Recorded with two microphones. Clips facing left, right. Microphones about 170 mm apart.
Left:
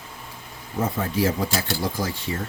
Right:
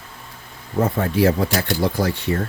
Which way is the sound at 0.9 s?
65° right (ahead or behind).